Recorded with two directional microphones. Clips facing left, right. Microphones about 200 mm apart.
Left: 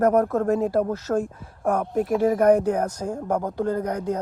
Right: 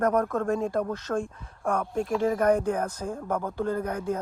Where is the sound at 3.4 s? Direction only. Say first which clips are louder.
Left 4 dB; 15° left (ahead or behind).